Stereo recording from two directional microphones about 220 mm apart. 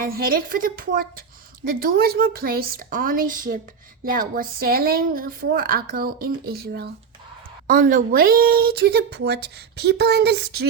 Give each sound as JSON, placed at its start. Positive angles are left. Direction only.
{"t": 0.1, "sound": "a woman's voice", "side_deg": -40}